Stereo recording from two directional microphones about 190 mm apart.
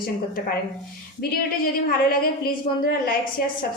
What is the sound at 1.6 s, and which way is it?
Speech, 50° left (ahead or behind).